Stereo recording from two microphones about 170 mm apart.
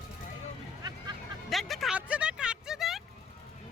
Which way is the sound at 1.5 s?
Centre (ahead or behind).